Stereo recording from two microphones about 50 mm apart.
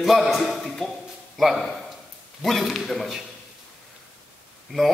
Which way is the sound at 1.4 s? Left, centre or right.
Centre.